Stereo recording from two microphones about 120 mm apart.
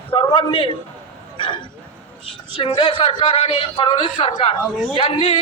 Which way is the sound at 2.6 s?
45° left (ahead or behind).